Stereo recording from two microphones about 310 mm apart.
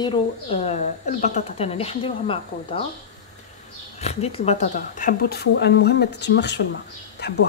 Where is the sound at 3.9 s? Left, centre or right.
Centre.